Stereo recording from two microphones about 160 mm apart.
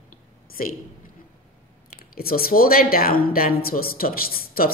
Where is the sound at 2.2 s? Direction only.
70° left (ahead or behind).